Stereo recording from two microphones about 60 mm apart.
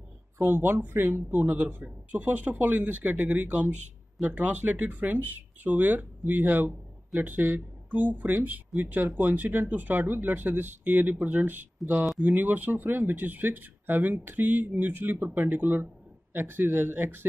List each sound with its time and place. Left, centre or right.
0.5 s speech: right
1.7 s speech: right